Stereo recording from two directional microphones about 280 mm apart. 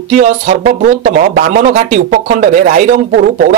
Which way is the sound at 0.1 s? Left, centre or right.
Right.